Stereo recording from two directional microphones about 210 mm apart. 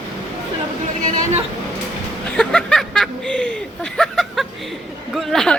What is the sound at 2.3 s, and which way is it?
Speech, 5° left (ahead or behind).